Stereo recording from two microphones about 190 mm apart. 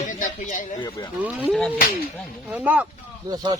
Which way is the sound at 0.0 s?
40° left (ahead or behind).